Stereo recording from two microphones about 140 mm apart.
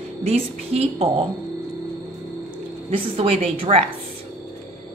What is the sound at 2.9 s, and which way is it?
Speech, 40° right (ahead or behind).